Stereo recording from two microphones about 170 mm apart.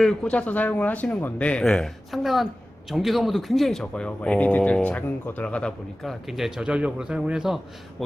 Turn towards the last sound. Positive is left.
turn(degrees=-5)  # may be behind; listen again after turning